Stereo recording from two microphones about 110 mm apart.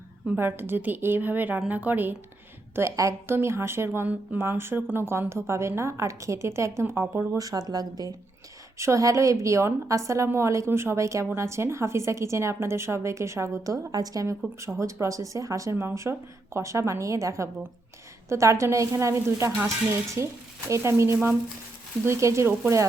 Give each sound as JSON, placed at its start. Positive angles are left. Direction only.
{"t": 0.3, "sound": "a woman's voice", "side_deg": -20}
{"t": 2.7, "sound": "a woman's voice", "side_deg": -30}
{"t": 7.2, "sound": "a woman's voice", "side_deg": -35}